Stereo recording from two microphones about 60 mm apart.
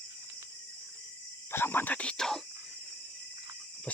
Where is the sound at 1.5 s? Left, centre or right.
Left.